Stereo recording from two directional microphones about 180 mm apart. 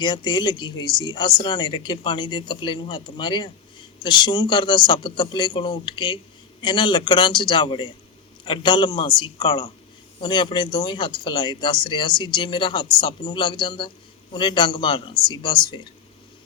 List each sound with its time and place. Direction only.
0.0 s speech: 25° left (ahead or behind)